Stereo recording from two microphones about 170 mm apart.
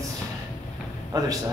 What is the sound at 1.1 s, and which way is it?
Speech, 20° right (ahead or behind).